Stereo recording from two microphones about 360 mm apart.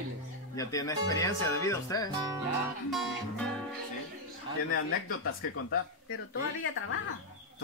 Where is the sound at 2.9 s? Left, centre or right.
Centre.